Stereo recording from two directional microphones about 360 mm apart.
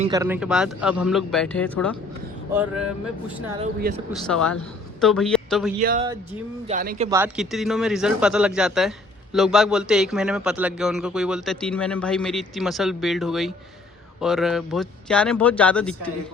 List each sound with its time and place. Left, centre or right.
0.0 s a man's voice: centre
3.6 s speech: right
4.1 s a man's voice: centre
5.8 s speech: right
7.1 s a man's voice: centre